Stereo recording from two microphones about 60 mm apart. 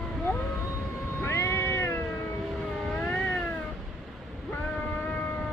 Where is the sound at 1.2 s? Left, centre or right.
Left.